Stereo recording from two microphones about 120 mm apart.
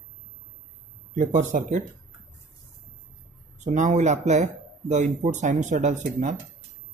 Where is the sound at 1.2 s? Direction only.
90° right.